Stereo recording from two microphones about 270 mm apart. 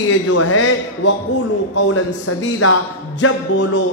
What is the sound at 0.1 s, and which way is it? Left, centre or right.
A man's voice, left.